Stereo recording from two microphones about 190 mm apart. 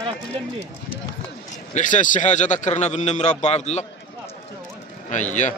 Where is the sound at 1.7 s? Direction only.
40° left (ahead or behind).